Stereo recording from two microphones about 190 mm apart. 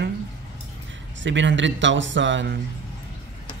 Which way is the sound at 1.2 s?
75° right (ahead or behind).